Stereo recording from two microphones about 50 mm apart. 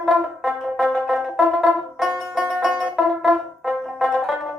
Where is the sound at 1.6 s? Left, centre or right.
Centre.